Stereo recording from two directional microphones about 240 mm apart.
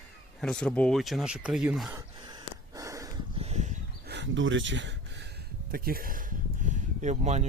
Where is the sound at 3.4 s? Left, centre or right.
Right.